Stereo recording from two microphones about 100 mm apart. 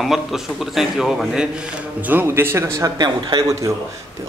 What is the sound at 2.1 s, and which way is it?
A man's voice, 20° right (ahead or behind).